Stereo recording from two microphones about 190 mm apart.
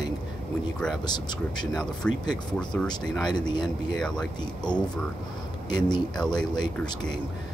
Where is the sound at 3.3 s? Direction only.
25° left (ahead or behind).